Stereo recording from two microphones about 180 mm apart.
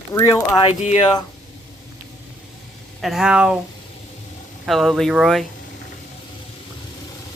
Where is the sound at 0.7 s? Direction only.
40° left (ahead or behind).